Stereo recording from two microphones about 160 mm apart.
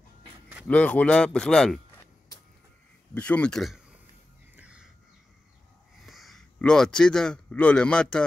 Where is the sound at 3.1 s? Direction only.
5° left (ahead or behind).